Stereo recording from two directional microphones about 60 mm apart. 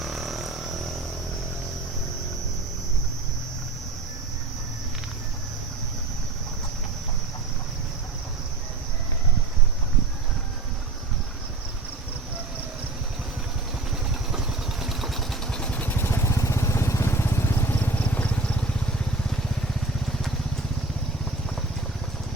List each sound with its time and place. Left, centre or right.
0.0 s vehicle: centre
14.3 s vehicle: centre
15.5 s vehicle: centre
15.8 s vehicle: left
17.7 s vehicle: left